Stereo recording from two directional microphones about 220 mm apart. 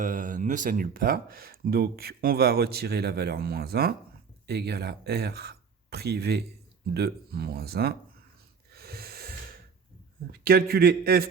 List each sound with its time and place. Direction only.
0.0 s speech: 35° right (ahead or behind)
8.7 s snort: 45° right (ahead or behind)
10.4 s speech: 45° right (ahead or behind)